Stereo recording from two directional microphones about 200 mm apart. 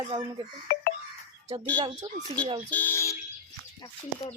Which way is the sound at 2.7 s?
10° left (ahead or behind).